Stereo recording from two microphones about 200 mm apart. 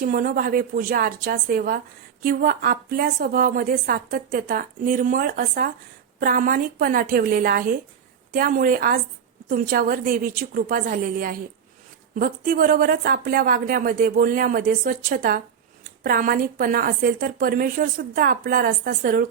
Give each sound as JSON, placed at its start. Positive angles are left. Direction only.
{"t": 0.0, "sound": "a woman's voice", "side_deg": -45}